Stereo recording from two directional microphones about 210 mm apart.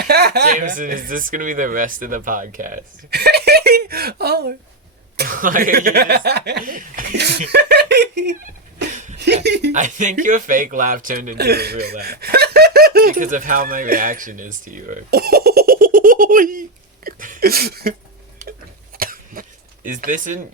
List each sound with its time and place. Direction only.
0.0 s speech: 50° right (ahead or behind)
0.5 s speech: 40° right (ahead or behind); by 8.2 s 55° right (ahead or behind)
8.9 s chuckle: 35° right (ahead or behind)
9.1 s speech: 55° right (ahead or behind)
9.7 s speech: 35° right (ahead or behind)
18.9 s cough: 45° right (ahead or behind)